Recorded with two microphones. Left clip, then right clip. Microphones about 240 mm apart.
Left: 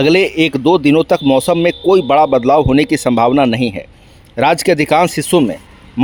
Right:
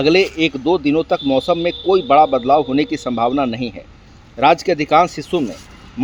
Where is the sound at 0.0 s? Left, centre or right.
Left.